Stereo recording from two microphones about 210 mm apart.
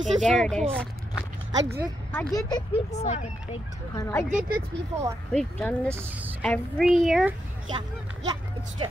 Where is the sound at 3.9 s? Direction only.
15° left (ahead or behind).